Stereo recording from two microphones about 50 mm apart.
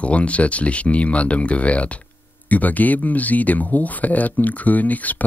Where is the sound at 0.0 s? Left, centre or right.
Left.